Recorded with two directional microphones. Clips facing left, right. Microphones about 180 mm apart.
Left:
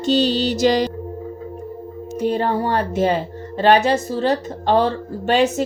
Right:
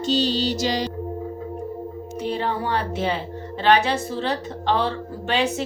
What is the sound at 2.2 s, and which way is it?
Speech, 45° left (ahead or behind).